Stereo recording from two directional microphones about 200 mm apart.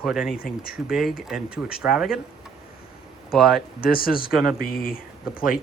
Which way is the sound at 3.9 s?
45° left (ahead or behind).